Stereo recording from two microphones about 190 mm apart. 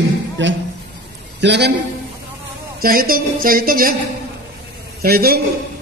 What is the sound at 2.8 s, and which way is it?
A man's voice, 50° right (ahead or behind).